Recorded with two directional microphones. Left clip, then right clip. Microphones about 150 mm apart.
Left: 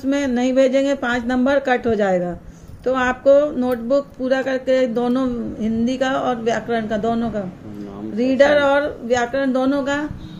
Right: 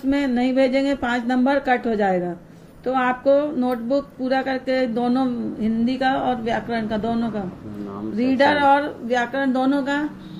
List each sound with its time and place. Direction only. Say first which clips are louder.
0.1 s speech: left 2 dB; 30° left (ahead or behind)